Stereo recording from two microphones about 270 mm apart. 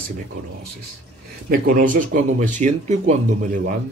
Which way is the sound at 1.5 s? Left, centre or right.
Right.